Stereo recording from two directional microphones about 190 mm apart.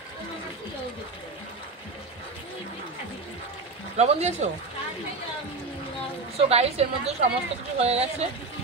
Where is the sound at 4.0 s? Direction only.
35° right (ahead or behind).